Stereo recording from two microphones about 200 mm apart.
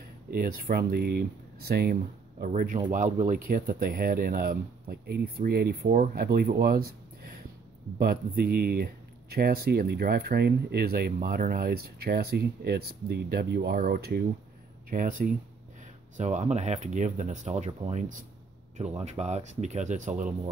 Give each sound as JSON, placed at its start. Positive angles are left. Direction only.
{"t": 0.3, "sound": "speech", "side_deg": -45}